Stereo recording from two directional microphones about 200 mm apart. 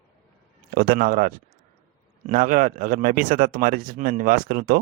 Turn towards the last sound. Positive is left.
turn(degrees=-45)  # may be behind; listen again after turning